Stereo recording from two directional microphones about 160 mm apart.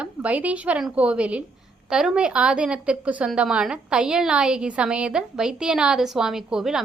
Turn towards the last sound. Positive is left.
turn(degrees=-5)  # may be behind; listen again after turning